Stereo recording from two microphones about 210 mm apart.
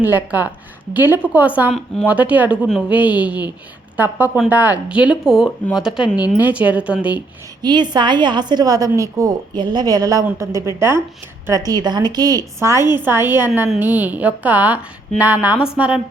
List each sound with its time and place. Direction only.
0.0 s a woman's voice: 10° right (ahead or behind)
6.1 s a woman's voice: 20° left (ahead or behind)
6.4 s a woman's voice: 5° right (ahead or behind)
7.6 s a woman's voice: 20° right (ahead or behind)